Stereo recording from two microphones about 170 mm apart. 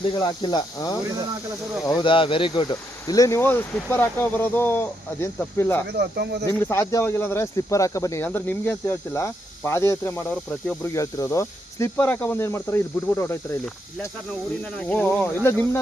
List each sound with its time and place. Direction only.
0.1 s speech: 25° left (ahead or behind)
5.9 s speech: 75° right (ahead or behind)
6.5 s speech: 15° left (ahead or behind)
14.6 s speech: 10° left (ahead or behind)